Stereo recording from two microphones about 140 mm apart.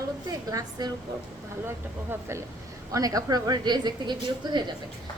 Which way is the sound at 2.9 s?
25° right (ahead or behind).